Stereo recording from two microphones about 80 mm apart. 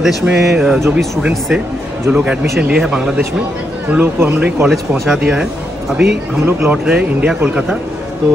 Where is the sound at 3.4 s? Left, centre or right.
Right.